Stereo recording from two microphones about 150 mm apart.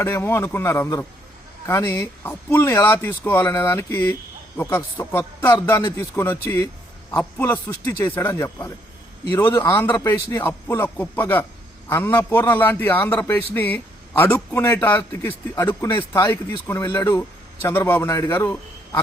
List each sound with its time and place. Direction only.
0.0 s a man's voice: 15° left (ahead or behind)